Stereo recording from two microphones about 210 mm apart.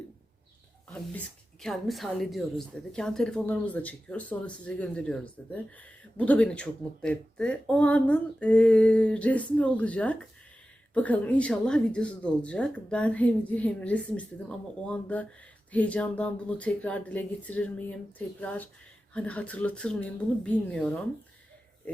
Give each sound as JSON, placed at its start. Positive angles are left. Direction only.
{"t": 1.6, "sound": "speech", "side_deg": 0}